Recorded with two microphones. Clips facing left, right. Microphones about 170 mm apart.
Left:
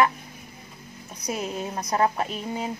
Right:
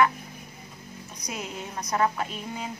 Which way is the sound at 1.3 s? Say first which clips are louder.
Left 6 dB; 30° left (ahead or behind).